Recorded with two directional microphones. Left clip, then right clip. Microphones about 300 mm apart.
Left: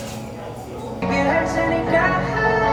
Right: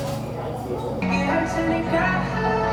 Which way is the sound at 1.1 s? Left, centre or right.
Left.